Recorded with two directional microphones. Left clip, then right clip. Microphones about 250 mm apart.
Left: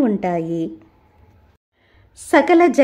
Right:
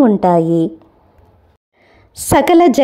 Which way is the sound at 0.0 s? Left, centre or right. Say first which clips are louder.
Right 9 dB; centre.